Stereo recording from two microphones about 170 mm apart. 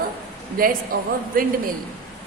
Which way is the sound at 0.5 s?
55° right (ahead or behind).